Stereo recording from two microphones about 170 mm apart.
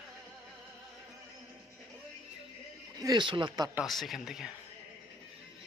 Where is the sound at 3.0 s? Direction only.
25° right (ahead or behind).